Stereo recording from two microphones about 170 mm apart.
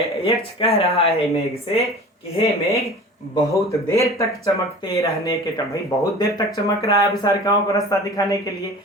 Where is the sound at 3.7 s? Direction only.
20° left (ahead or behind).